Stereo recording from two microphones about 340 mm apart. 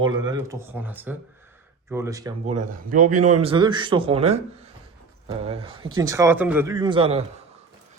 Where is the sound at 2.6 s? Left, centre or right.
Right.